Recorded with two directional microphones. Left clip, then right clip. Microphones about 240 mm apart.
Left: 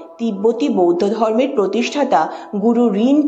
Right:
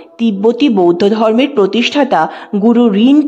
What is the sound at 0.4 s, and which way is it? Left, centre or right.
A woman's voice, right.